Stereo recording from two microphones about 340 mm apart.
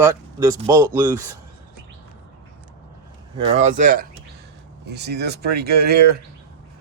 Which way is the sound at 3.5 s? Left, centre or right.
Right.